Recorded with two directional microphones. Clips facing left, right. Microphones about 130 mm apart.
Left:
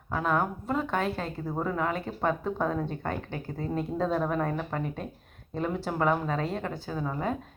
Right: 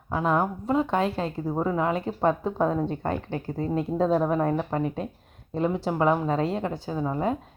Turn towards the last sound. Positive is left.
turn(degrees=-25)  # may be behind; listen again after turning